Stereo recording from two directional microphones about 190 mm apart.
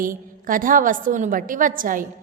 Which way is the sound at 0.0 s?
45° right (ahead or behind).